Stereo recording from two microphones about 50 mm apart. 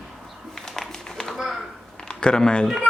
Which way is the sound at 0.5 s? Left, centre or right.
Centre.